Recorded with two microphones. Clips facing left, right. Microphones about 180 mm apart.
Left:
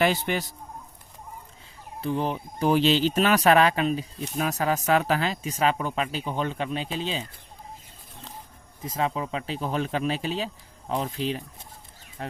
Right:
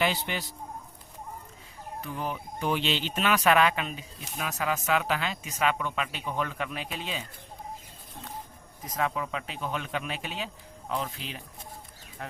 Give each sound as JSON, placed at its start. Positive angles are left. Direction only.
{"t": 0.0, "sound": "speech", "side_deg": 50}
{"t": 2.0, "sound": "speech", "side_deg": 30}
{"t": 8.8, "sound": "speech", "side_deg": 25}